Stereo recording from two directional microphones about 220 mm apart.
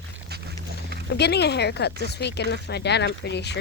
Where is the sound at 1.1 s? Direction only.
50° left (ahead or behind).